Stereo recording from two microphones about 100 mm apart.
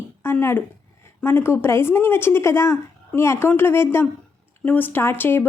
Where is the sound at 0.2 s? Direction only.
25° left (ahead or behind).